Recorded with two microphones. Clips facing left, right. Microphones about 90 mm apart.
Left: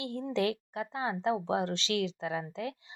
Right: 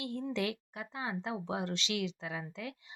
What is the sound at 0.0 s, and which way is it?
A woman's voice, 30° left (ahead or behind).